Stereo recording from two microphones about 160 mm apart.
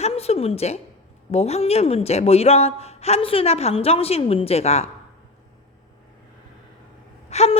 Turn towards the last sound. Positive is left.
turn(degrees=40)  # may be behind; listen again after turning